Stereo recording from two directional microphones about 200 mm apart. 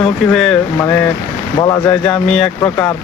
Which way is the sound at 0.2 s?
Centre (ahead or behind).